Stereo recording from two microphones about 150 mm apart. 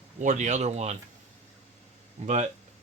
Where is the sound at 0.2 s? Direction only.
55° right (ahead or behind).